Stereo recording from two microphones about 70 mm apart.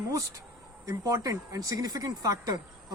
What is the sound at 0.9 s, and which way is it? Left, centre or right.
Speech, right.